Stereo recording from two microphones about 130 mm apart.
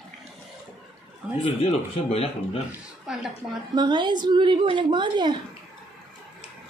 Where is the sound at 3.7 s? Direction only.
35° right (ahead or behind).